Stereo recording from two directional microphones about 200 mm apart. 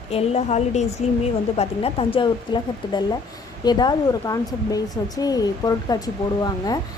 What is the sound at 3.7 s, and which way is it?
A woman's voice, 20° left (ahead or behind).